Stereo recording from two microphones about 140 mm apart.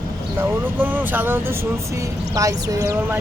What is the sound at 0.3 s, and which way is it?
Speech, 15° right (ahead or behind).